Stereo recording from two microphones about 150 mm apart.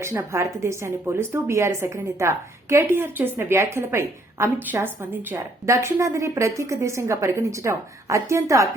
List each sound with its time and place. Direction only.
0.0 s a woman's voice: 20° right (ahead or behind)